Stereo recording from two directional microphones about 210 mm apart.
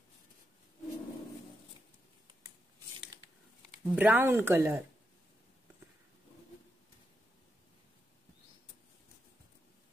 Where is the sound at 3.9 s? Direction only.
5° right (ahead or behind).